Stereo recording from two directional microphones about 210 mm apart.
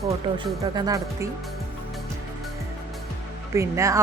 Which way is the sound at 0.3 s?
20° right (ahead or behind).